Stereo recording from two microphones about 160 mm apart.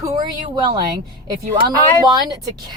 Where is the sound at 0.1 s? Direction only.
30° right (ahead or behind).